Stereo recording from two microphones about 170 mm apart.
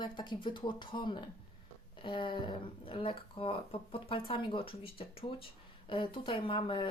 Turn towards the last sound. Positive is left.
turn(degrees=30)  # may be behind; listen again after turning